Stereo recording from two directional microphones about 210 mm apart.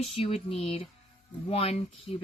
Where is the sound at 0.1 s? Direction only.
30° left (ahead or behind).